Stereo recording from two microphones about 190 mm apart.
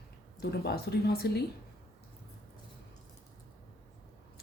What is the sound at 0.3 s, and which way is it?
Speech, 55° left (ahead or behind).